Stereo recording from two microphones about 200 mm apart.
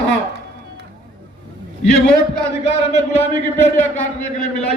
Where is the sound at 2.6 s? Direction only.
35° left (ahead or behind).